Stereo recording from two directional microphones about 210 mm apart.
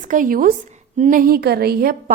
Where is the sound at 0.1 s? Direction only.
40° right (ahead or behind).